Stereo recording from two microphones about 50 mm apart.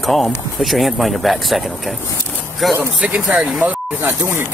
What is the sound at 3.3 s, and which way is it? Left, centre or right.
Speech, centre.